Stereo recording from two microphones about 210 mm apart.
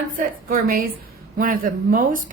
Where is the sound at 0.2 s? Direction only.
45° right (ahead or behind).